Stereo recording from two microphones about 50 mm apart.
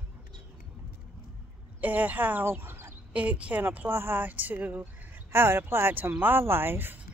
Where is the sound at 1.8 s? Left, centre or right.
Right.